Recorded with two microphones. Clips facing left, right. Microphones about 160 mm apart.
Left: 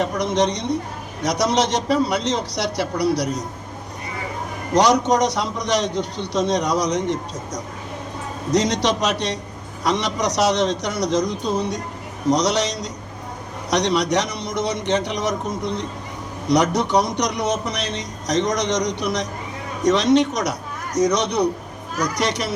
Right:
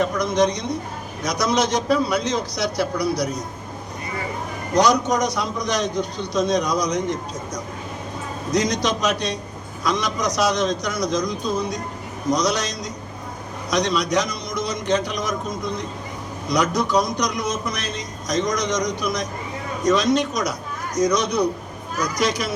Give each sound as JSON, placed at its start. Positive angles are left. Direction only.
{"t": 0.0, "sound": "a man's voice", "side_deg": 75}
{"t": 4.7, "sound": "a man's voice", "side_deg": 75}
{"t": 8.5, "sound": "a man's voice", "side_deg": 75}